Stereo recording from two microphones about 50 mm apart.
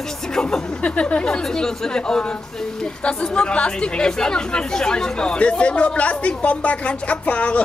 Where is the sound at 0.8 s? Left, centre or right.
Left.